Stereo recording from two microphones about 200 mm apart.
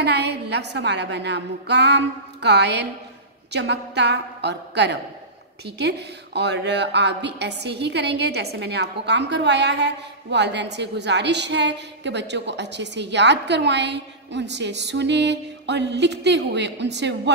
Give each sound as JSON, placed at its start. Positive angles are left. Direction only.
{"t": 0.0, "sound": "a woman's voice", "side_deg": -55}